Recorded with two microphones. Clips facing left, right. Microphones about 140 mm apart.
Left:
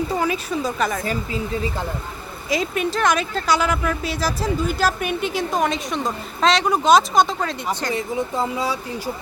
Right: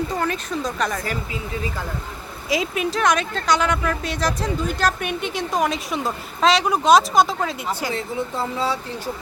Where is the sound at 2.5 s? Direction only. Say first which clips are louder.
Left 1 dB; centre (ahead or behind).